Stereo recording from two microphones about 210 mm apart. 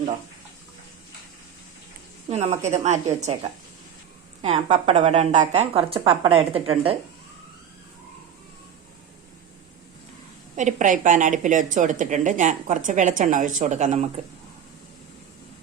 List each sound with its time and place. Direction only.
2.3 s a woman's voice: 35° right (ahead or behind)
10.5 s a woman's voice: 35° right (ahead or behind)